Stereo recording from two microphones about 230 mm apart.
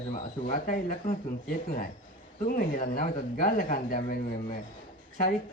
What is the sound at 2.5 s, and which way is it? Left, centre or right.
Speech, left.